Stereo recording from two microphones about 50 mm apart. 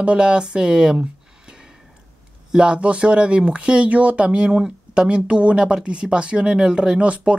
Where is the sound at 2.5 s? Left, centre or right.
Centre.